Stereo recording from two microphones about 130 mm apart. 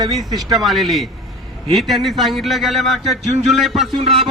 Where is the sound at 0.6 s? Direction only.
Centre (ahead or behind).